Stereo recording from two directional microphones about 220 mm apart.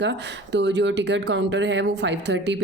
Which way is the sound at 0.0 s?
55° right (ahead or behind).